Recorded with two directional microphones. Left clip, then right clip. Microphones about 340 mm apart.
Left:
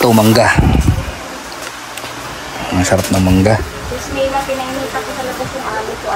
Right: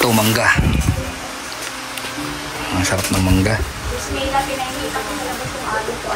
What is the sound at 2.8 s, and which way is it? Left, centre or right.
Speech, centre.